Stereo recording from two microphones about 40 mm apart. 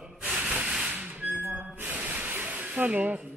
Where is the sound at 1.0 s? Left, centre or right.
Right.